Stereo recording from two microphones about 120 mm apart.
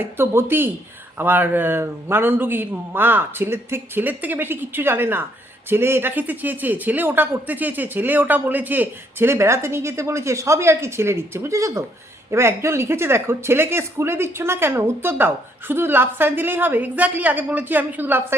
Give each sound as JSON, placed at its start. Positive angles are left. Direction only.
{"t": 0.0, "sound": "a man's voice", "side_deg": -20}